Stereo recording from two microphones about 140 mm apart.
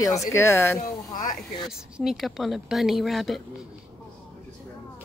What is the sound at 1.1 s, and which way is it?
Speech, 75° left (ahead or behind).